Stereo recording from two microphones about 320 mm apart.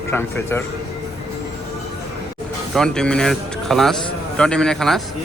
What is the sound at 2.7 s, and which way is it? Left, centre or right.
Speech, centre.